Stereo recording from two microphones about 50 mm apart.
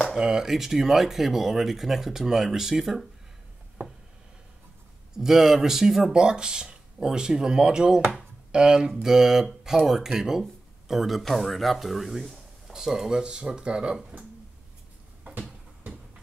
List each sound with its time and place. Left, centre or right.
0.2 s speech: centre
5.1 s speech: centre
8.0 s speech: centre
8.5 s speech: centre